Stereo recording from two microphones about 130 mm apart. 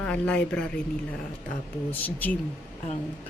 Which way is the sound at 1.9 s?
15° left (ahead or behind).